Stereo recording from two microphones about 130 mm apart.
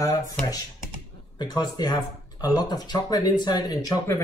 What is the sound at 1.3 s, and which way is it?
Speech, 35° left (ahead or behind).